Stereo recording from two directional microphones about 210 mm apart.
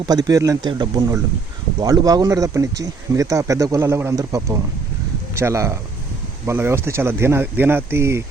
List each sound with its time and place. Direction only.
0.0 s speech: 20° right (ahead or behind)